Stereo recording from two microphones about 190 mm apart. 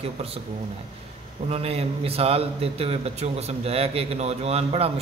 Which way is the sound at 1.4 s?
30° right (ahead or behind).